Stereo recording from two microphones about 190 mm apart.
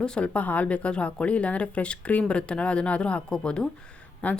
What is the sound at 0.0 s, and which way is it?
Speech, 5° left (ahead or behind).